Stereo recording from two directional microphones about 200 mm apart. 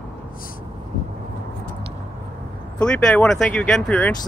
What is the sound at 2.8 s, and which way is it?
Speech, 5° left (ahead or behind).